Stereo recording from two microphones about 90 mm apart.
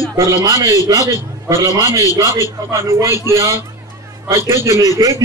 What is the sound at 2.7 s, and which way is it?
A man's voice, 30° right (ahead or behind).